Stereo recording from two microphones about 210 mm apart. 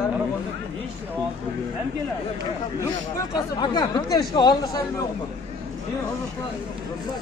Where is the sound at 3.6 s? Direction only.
20° left (ahead or behind).